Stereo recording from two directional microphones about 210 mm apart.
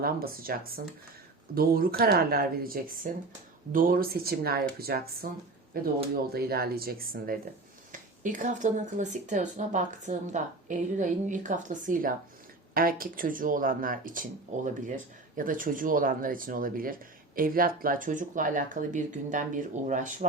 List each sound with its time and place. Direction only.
0.0 s speech: 45° right (ahead or behind)